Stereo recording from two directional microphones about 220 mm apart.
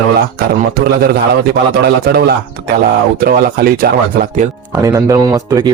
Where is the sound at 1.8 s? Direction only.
45° right (ahead or behind).